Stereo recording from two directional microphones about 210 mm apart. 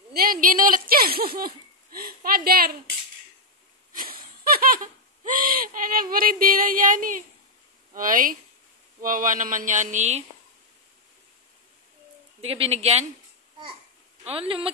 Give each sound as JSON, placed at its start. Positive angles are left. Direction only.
{"t": 0.1, "sound": "speech", "side_deg": -45}
{"t": 3.9, "sound": "a sound", "side_deg": -45}
{"t": 12.4, "sound": "a woman's voice", "side_deg": -30}
{"t": 14.2, "sound": "a woman's voice", "side_deg": -25}